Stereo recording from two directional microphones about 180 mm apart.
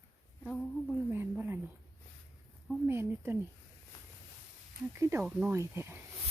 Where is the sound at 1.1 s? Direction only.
10° right (ahead or behind).